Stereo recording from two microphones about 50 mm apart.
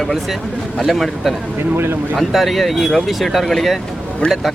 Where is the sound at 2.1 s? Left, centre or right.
Centre.